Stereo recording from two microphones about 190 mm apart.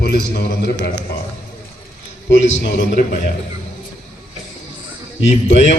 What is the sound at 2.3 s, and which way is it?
Speech, 65° left (ahead or behind).